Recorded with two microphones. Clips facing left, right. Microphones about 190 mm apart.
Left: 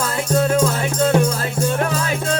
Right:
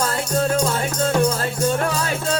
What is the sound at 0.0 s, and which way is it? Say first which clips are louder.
Music: left 2 dB; 40° right (ahead or behind).